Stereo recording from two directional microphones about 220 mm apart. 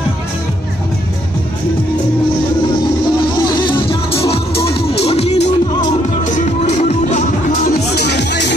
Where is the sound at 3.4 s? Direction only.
20° left (ahead or behind); by 7.8 s 35° left (ahead or behind).